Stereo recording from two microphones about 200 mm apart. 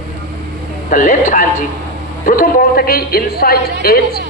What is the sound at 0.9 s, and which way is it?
A woman's voice, 40° left (ahead or behind).